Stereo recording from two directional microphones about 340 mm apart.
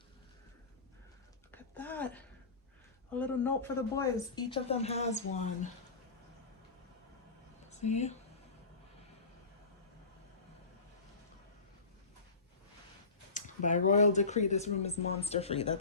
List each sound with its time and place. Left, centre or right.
1.5 s a sound: centre
3.2 s a woman's voice: centre
7.7 s speech: centre
13.3 s speech: left